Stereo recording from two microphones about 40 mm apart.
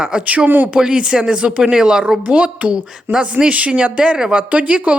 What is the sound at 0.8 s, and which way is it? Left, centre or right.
Speech, right.